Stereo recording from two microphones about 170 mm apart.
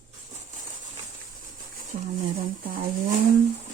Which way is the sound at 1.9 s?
55° right (ahead or behind).